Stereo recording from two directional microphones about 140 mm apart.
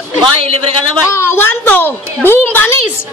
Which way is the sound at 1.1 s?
20° left (ahead or behind).